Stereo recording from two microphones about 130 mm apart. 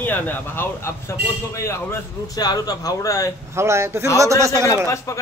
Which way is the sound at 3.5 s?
20° right (ahead or behind).